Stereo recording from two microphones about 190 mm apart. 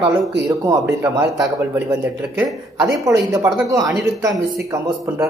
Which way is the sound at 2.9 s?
15° right (ahead or behind).